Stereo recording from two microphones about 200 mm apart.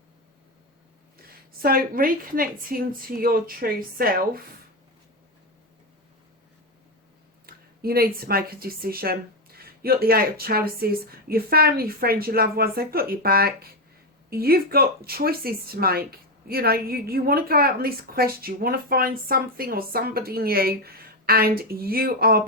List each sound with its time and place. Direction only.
1.6 s speech: 45° right (ahead or behind)
7.4 s speech: 50° right (ahead or behind)